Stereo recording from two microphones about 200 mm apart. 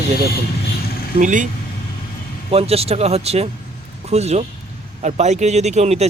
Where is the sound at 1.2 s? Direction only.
40° right (ahead or behind).